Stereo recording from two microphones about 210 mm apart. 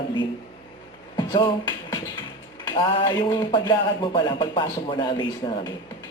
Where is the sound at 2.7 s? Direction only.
20° left (ahead or behind).